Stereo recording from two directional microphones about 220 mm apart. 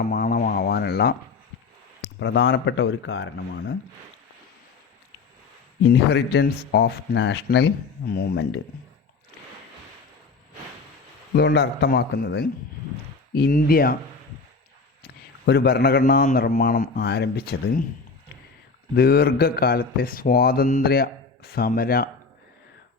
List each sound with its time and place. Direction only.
0.1 s speech: 45° left (ahead or behind)
2.1 s speech: 55° left (ahead or behind)
5.8 s speech: 50° left (ahead or behind)
11.3 s speech: 50° left (ahead or behind)
15.0 s speech: 45° left (ahead or behind)
18.9 s speech: 45° left (ahead or behind)